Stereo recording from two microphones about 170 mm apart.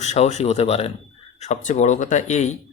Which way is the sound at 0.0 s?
40° left (ahead or behind).